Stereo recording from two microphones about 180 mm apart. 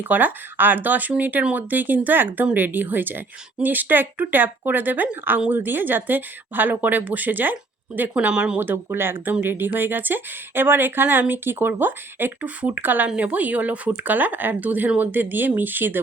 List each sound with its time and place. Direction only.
0.0 s speech: 10° right (ahead or behind)